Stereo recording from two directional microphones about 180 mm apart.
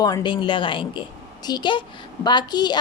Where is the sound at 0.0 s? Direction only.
25° left (ahead or behind).